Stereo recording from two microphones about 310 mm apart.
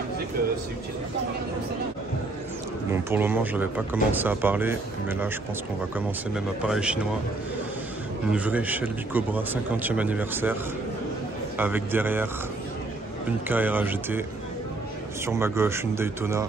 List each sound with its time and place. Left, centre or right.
2.9 s speech: centre
5.9 s speech: centre
8.3 s speech: centre
13.5 s speech: centre
15.2 s speech: centre